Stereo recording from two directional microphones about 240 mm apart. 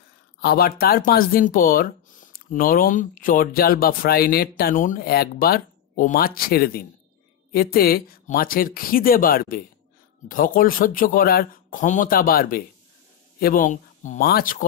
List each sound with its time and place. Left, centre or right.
0.4 s speech: left